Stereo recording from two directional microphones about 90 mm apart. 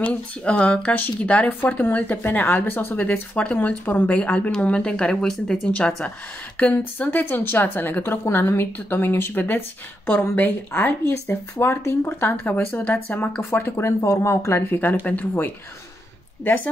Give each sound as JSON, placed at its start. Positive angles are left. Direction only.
{"t": 0.0, "sound": "a woman's voice", "side_deg": 15}